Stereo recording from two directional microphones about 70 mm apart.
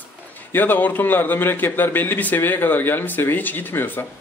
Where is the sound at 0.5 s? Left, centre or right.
Left.